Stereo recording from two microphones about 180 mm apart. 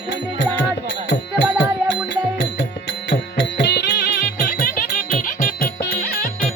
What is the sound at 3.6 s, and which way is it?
Music, 65° left (ahead or behind).